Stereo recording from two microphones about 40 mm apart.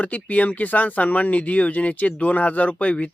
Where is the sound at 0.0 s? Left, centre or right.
Left.